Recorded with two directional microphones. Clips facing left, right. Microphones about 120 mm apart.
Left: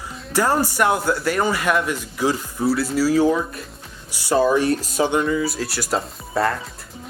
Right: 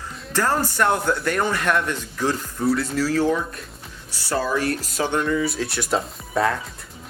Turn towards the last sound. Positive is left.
turn(degrees=0)  # may be behind; listen again after turning